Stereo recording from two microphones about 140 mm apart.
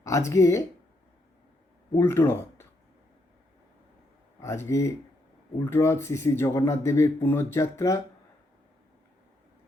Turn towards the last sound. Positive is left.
turn(degrees=20)  # may be behind; listen again after turning